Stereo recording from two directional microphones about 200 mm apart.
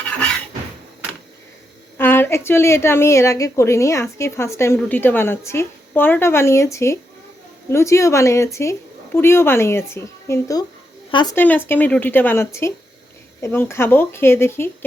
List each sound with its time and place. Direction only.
2.0 s a woman's voice: 10° left (ahead or behind)
11.3 s a woman's voice: 10° left (ahead or behind)